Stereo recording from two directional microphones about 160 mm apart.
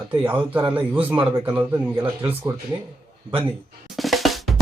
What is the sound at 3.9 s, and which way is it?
Drum, centre (ahead or behind).